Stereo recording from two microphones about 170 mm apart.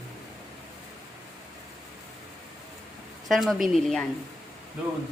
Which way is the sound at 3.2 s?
Centre (ahead or behind).